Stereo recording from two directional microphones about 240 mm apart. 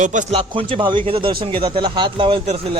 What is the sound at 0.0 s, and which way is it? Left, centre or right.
A man's voice, right.